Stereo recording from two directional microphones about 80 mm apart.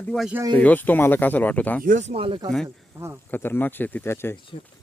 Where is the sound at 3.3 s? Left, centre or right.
Left.